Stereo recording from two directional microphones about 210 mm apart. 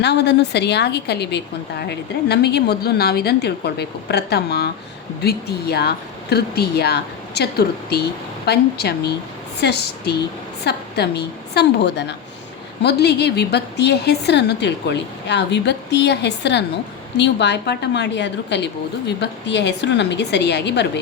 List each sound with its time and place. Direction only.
0.0 s a woman's voice: 55° left (ahead or behind)